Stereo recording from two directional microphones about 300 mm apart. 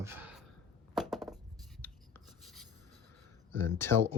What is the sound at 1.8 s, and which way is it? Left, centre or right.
Writing, centre.